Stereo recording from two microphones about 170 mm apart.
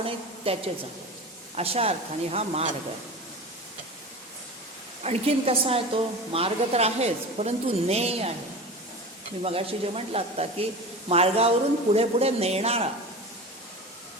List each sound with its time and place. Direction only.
0.0 s a sound: 35° right (ahead or behind)
1.5 s a woman's voice: 35° right (ahead or behind)
5.0 s a woman's voice: 35° right (ahead or behind)
9.4 s a woman's voice: 35° right (ahead or behind)